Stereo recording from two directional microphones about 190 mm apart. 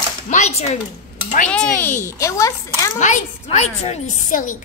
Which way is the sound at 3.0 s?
40° left (ahead or behind).